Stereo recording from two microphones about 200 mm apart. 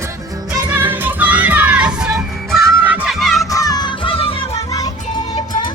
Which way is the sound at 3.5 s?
20° left (ahead or behind).